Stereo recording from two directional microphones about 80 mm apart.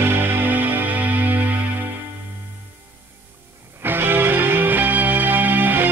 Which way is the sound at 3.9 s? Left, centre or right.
Right.